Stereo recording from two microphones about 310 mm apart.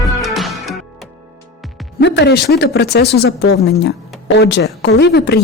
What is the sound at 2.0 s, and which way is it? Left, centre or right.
Speech, left.